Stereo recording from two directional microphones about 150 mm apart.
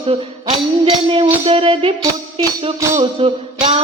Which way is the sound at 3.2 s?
35° right (ahead or behind).